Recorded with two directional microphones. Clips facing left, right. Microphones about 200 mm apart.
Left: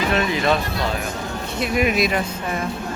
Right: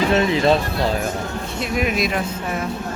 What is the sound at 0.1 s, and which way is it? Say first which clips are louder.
Speech: right 3 dB; 25° right (ahead or behind).